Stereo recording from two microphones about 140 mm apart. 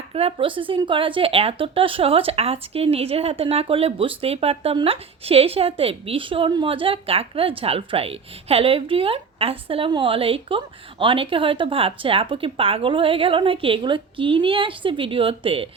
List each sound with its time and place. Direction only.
0.1 s a woman's voice: 45° right (ahead or behind)